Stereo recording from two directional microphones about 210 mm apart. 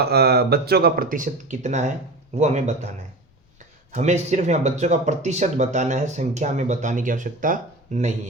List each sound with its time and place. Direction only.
0.0 s speech: 50° right (ahead or behind); by 2.9 s 30° right (ahead or behind)
3.9 s speech: 35° right (ahead or behind)